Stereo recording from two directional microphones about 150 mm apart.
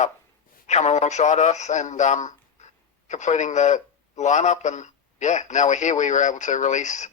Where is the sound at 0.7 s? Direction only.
50° left (ahead or behind).